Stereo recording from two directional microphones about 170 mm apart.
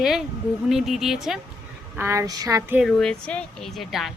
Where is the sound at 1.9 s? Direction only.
15° right (ahead or behind).